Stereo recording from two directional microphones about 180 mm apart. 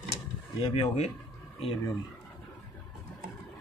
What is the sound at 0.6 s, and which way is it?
Speech, 30° left (ahead or behind).